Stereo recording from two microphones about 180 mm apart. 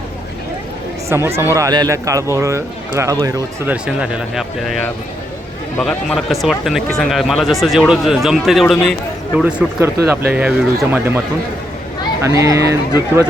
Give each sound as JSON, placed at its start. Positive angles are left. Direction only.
{"t": 1.1, "sound": "speech", "side_deg": -15}
{"t": 3.7, "sound": "speech", "side_deg": -5}
{"t": 5.8, "sound": "speech", "side_deg": 0}
{"t": 12.2, "sound": "speech", "side_deg": -15}